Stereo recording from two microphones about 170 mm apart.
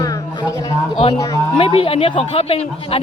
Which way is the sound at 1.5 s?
30° left (ahead or behind).